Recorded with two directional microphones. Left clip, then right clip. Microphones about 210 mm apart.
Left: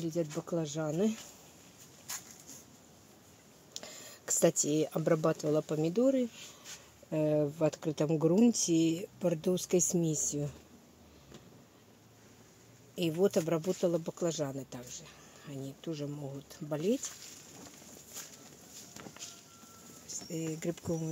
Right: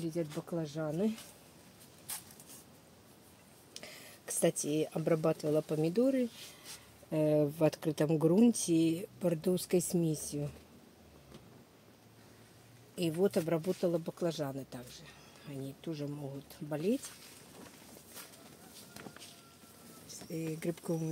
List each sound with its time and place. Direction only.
0.0 s speech: 20° left (ahead or behind)
3.8 s speech: 20° left (ahead or behind); by 7.4 s centre (ahead or behind)
7.4 s speech: 10° right (ahead or behind); by 10.5 s 15° left (ahead or behind)
12.9 s speech: 15° left (ahead or behind)
20.3 s speech: 5° left (ahead or behind)